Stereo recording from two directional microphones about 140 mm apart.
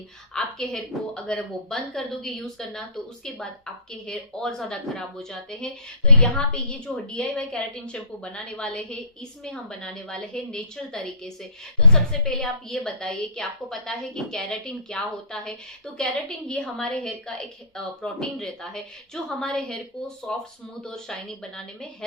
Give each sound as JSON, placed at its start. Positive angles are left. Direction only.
{"t": 0.3, "sound": "a woman's voice", "side_deg": 5}
{"t": 4.0, "sound": "a woman's voice", "side_deg": 5}